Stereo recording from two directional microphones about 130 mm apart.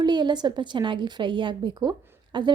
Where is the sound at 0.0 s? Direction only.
35° right (ahead or behind).